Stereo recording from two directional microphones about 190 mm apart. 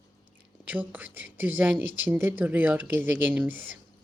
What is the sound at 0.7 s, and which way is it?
Speech, 10° right (ahead or behind).